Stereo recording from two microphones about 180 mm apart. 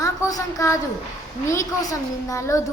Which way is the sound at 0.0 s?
20° left (ahead or behind).